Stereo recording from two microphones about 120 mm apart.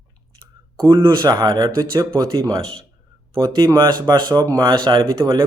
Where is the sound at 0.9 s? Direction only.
40° right (ahead or behind).